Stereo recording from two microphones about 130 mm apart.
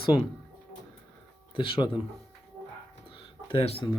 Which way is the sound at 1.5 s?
40° left (ahead or behind).